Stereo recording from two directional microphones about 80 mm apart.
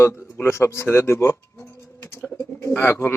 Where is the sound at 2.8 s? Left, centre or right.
Left.